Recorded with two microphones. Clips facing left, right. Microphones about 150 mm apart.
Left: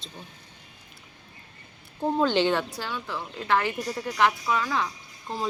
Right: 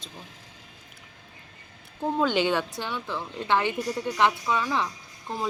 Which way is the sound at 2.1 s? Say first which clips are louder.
Left 1 dB; 10° right (ahead or behind).